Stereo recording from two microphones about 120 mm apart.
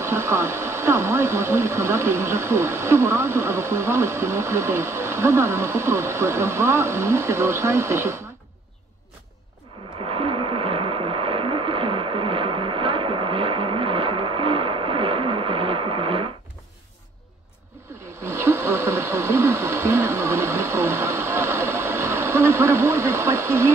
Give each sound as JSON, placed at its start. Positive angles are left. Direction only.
{"t": 0.0, "sound": "speech", "side_deg": -20}
{"t": 10.0, "sound": "radio", "side_deg": -50}
{"t": 18.0, "sound": "a sound", "side_deg": -20}